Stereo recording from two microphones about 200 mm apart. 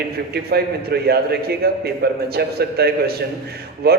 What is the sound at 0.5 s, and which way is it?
A man's voice, 50° right (ahead or behind).